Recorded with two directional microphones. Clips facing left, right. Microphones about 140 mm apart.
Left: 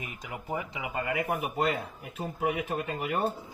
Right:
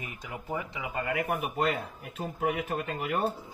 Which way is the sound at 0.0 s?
10° left (ahead or behind).